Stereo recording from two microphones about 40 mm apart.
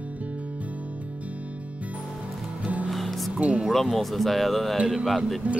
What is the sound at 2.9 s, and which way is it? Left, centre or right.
Music, centre.